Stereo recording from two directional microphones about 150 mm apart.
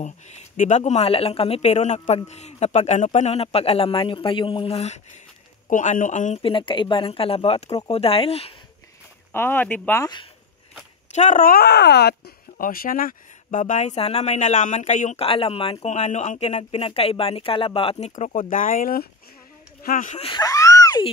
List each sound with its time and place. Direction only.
0.0 s speech: 50° left (ahead or behind)
5.7 s speech: 55° left (ahead or behind)
6.3 s speech: 35° left (ahead or behind)
9.3 s speech: 15° left (ahead or behind)
11.1 s speech: 60° left (ahead or behind); by 18.1 s 40° left (ahead or behind)
18.1 s speech: 55° left (ahead or behind)
20.2 s a sound: 30° left (ahead or behind)